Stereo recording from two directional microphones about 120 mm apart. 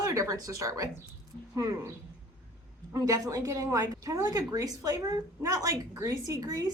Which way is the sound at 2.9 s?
30° right (ahead or behind).